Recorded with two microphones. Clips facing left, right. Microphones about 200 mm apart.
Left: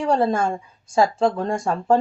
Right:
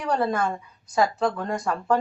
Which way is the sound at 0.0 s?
30° left (ahead or behind).